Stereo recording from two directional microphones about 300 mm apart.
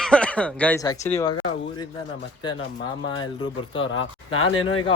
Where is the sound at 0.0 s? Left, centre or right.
Centre.